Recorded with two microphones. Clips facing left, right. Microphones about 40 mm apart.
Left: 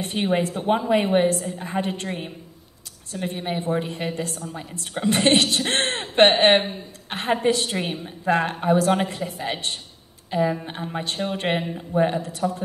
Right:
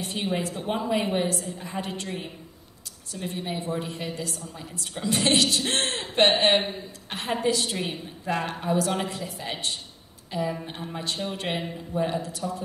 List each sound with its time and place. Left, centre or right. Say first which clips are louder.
0.0 s a woman's voice: left 6 dB; left
10.5 s a woman's voice: left 5 dB; left